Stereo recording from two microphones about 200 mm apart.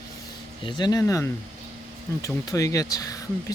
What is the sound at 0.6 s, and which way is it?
Speech, 20° left (ahead or behind).